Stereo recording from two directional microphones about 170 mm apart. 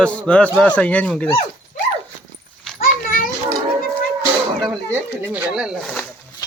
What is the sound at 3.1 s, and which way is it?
Children playing, 55° left (ahead or behind).